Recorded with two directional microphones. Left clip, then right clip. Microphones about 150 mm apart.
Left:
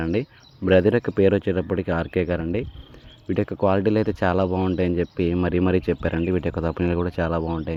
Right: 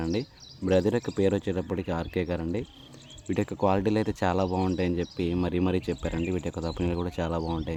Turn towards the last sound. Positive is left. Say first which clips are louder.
# left 6 dB
turn(degrees=25)  # may be behind; listen again after turning